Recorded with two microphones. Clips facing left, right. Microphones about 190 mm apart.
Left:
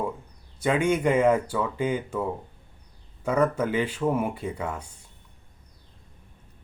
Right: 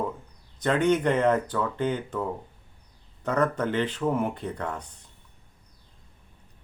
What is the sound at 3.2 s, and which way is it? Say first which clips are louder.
Speech: left 2 dB; 10° left (ahead or behind).